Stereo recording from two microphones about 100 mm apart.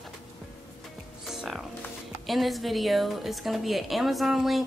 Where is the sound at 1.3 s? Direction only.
Centre (ahead or behind).